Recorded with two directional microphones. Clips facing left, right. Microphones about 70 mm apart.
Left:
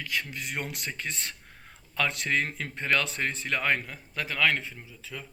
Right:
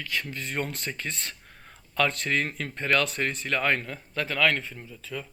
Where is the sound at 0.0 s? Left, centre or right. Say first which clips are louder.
Right 1 dB; centre.